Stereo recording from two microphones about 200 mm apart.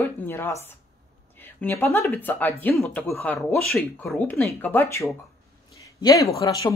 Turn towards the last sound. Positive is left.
turn(degrees=15)  # may be behind; listen again after turning